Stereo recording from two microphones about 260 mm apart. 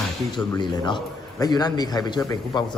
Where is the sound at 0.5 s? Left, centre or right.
Centre.